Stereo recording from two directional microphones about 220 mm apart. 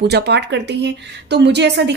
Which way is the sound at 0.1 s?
50° right (ahead or behind).